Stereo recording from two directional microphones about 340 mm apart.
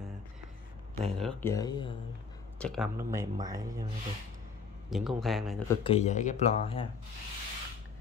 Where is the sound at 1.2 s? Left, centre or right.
Centre.